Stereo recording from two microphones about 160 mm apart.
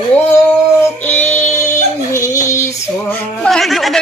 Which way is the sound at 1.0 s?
10° left (ahead or behind).